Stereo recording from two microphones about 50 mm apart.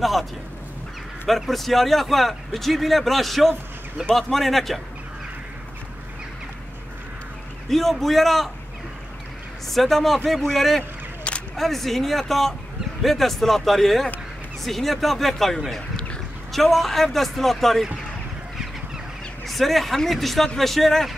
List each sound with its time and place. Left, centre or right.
0.0 s a man's voice: centre
7.7 s a man's voice: centre
9.7 s a man's voice: centre
10.8 s whip: left
11.5 s a man's voice: centre
19.4 s a man's voice: centre